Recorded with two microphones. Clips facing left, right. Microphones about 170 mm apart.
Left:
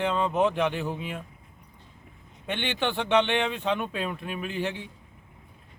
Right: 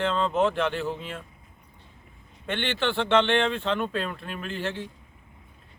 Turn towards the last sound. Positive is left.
turn(degrees=15)  # may be behind; listen again after turning